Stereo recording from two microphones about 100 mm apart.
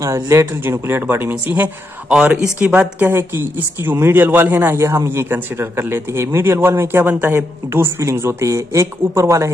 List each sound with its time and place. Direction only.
0.0 s speech: 30° right (ahead or behind)